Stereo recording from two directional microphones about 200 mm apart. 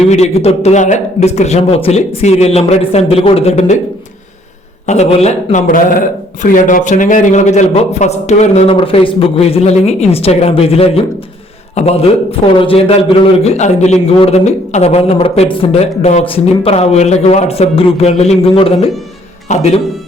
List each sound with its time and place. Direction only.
0.1 s speech: 30° left (ahead or behind)
4.9 s a man's voice: 35° left (ahead or behind)